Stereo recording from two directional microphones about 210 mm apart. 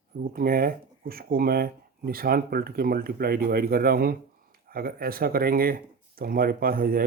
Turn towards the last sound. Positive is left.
turn(degrees=-45)  # may be behind; listen again after turning